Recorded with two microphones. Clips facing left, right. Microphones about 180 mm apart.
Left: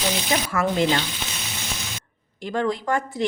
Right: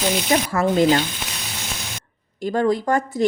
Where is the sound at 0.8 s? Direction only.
40° right (ahead or behind).